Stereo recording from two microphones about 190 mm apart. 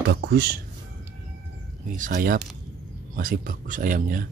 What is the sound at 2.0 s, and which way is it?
Speech, 45° right (ahead or behind).